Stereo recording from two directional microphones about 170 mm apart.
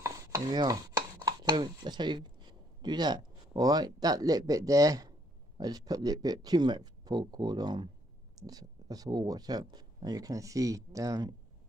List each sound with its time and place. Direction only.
0.0 s chopping: 25° right (ahead or behind)
1.2 s speech: 25° right (ahead or behind)